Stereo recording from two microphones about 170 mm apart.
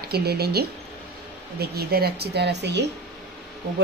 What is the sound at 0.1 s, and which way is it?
A woman's voice, 70° right (ahead or behind).